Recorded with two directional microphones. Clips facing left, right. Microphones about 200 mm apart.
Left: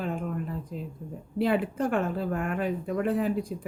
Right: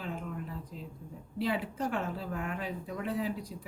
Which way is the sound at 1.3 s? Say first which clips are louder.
Left 7 dB; 55° left (ahead or behind).